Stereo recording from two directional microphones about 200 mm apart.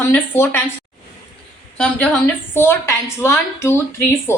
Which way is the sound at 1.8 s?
5° left (ahead or behind).